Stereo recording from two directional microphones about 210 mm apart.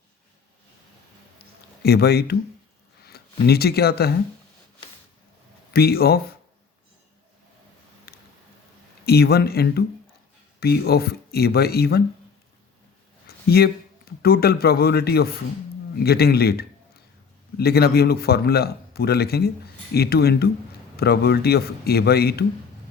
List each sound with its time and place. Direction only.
1.8 s a man's voice: 50° left (ahead or behind)
3.4 s a man's voice: 50° left (ahead or behind)
5.7 s a man's voice: 45° left (ahead or behind)
8.1 s a sound: 50° left (ahead or behind)
9.0 s a man's voice: 50° left (ahead or behind)
13.2 s a sound: 45° left (ahead or behind)
14.2 s a man's voice: 45° left (ahead or behind)